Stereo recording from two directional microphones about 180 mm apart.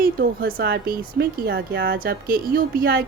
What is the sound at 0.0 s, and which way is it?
A woman's voice, 55° right (ahead or behind).